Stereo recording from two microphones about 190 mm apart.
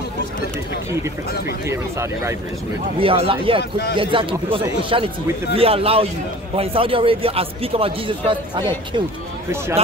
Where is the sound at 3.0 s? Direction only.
30° right (ahead or behind).